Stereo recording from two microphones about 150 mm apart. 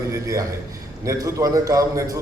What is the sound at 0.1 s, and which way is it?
A man's voice, 20° right (ahead or behind).